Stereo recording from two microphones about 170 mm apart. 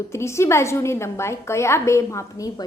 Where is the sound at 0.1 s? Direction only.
15° left (ahead or behind).